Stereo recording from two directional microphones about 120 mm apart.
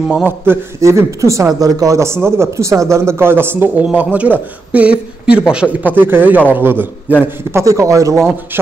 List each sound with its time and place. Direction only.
0.1 s a man's voice: 15° right (ahead or behind)
0.7 s a man's voice: 25° right (ahead or behind)